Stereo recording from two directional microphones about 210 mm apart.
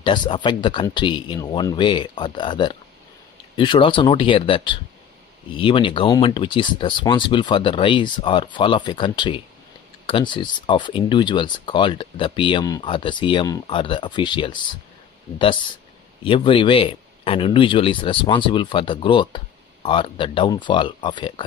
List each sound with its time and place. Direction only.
0.0 s speech: 20° left (ahead or behind)
16.3 s speech: 25° left (ahead or behind)